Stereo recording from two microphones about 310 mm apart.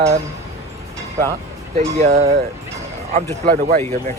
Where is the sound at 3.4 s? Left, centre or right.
Right.